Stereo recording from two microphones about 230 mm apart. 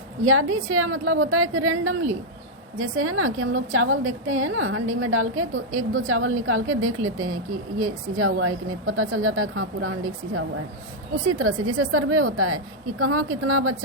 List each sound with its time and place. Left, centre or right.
0.3 s a woman's voice: right